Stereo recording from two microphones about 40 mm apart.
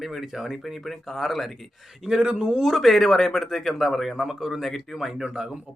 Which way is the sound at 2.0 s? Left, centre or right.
Centre.